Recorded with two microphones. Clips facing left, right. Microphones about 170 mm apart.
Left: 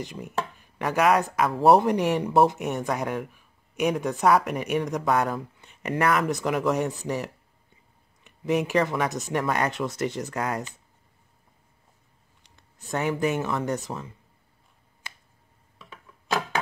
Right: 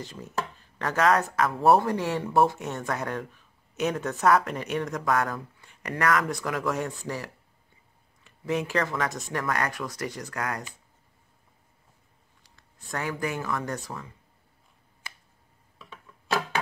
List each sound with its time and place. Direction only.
0.0 s speech: 15° left (ahead or behind)
12.4 s speech: 20° left (ahead or behind)